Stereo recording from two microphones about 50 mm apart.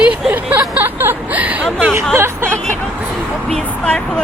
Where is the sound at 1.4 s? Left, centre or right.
Right.